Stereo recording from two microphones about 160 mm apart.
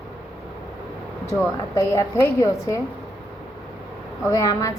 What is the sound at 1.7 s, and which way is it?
Speech, 20° left (ahead or behind).